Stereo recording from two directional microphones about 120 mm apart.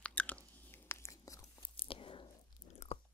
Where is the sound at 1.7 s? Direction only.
50° left (ahead or behind).